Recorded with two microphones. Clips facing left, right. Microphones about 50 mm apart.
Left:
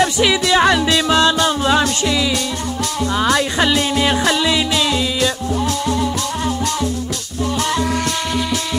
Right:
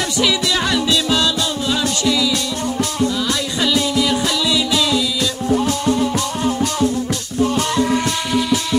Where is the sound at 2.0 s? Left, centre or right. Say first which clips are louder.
Even; left.